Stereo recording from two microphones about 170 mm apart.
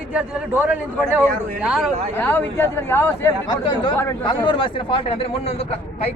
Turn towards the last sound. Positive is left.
turn(degrees=35)  # may be behind; listen again after turning